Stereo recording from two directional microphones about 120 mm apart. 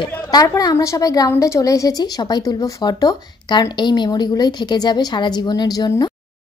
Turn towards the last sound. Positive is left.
turn(degrees=35)  # may be behind; listen again after turning